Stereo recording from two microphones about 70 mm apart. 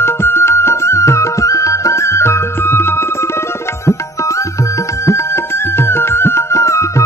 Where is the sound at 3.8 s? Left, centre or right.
Left.